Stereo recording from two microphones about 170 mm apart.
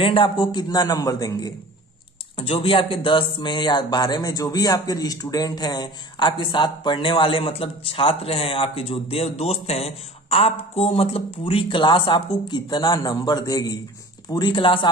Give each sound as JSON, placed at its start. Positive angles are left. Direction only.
{"t": 0.0, "sound": "speech", "side_deg": 30}
{"t": 2.3, "sound": "speech", "side_deg": 35}